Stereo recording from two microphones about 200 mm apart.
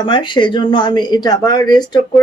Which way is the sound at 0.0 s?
25° left (ahead or behind).